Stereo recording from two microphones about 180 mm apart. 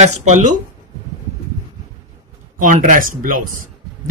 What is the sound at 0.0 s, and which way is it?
Speech, 40° right (ahead or behind).